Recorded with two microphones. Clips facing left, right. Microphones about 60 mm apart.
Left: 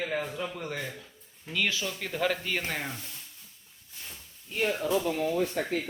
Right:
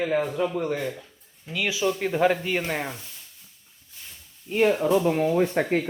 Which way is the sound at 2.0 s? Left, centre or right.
Right.